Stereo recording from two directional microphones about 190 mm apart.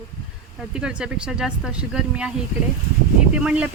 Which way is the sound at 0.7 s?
5° right (ahead or behind).